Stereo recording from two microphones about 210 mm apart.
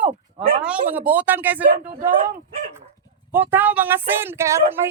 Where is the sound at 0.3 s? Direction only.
25° right (ahead or behind).